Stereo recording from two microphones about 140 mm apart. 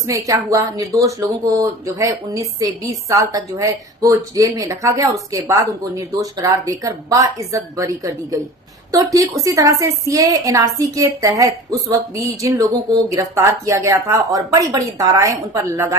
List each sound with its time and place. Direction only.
0.0 s speech: 20° right (ahead or behind)